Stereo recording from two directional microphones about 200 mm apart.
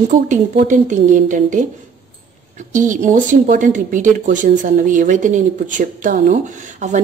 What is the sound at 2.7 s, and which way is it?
Speech, 40° right (ahead or behind).